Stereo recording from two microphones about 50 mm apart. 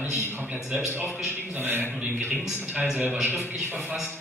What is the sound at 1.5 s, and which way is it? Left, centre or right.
A man's voice, right.